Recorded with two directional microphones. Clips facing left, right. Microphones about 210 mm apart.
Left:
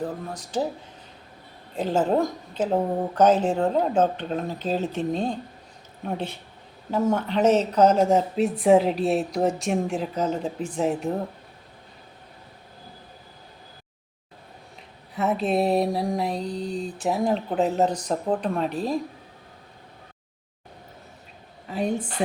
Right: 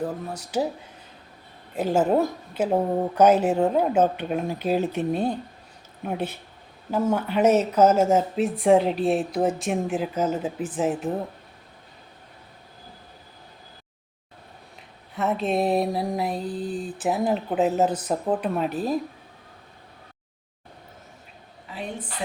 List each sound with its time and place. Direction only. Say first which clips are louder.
0.0 s a woman's voice: right 1 dB; 10° right (ahead or behind)
1.7 s a woman's voice: right 1 dB; 10° right (ahead or behind)
15.1 s speech: left 1 dB; centre (ahead or behind)
21.7 s a woman's voice: left 8 dB; 45° left (ahead or behind)